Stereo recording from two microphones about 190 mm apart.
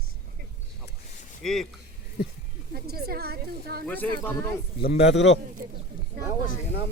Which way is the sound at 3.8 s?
10° left (ahead or behind).